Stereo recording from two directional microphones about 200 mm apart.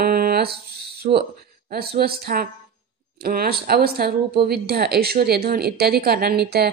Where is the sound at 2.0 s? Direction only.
50° right (ahead or behind).